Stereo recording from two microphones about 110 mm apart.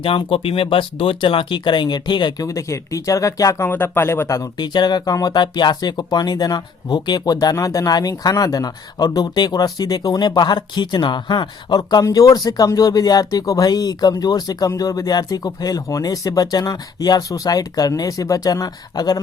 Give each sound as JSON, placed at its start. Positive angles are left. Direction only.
{"t": 0.0, "sound": "speech", "side_deg": 50}
{"t": 2.5, "sound": "speech", "side_deg": 30}
{"t": 4.5, "sound": "speech", "side_deg": 40}